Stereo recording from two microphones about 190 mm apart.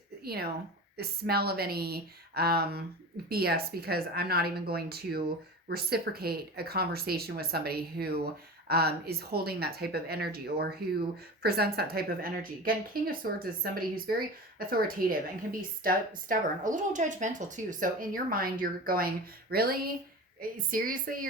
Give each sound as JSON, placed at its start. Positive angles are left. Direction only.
{"t": 0.3, "sound": "speech", "side_deg": -55}